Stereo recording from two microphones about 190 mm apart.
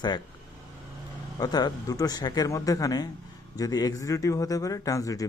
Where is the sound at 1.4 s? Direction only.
20° left (ahead or behind).